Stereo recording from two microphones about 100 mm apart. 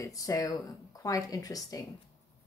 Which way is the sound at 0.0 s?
35° left (ahead or behind).